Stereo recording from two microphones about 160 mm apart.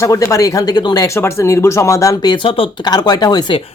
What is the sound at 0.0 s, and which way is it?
Speech, 20° left (ahead or behind).